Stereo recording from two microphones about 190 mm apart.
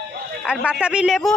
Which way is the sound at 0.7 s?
5° right (ahead or behind).